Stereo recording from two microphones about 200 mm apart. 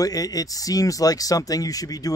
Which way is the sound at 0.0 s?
20° left (ahead or behind).